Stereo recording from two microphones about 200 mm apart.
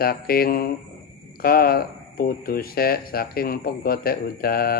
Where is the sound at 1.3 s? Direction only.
50° left (ahead or behind).